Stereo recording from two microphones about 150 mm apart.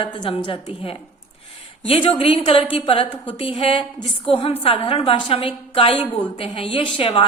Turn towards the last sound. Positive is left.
turn(degrees=35)  # may be behind; listen again after turning